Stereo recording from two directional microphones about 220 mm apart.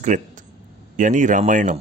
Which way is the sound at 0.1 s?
35° right (ahead or behind).